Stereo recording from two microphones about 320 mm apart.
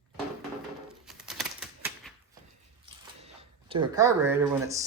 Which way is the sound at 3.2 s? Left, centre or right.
Centre.